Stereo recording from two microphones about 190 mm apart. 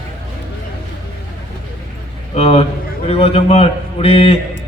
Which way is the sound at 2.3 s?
30° left (ahead or behind).